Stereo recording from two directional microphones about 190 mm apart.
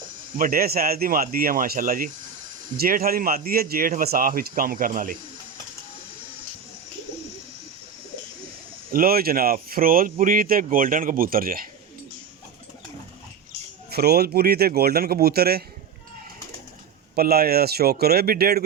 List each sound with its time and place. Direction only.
0.3 s speech: 50° right (ahead or behind)
8.9 s speech: 50° right (ahead or behind)
13.9 s speech: 55° right (ahead or behind)
17.2 s speech: 55° right (ahead or behind)